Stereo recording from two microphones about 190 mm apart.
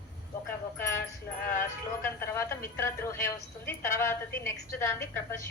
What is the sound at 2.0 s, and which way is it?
A woman's voice, 10° left (ahead or behind).